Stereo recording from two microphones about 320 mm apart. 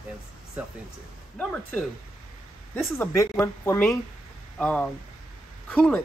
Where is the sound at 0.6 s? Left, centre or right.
Centre.